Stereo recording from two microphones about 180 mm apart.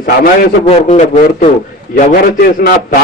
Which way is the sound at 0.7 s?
40° left (ahead or behind).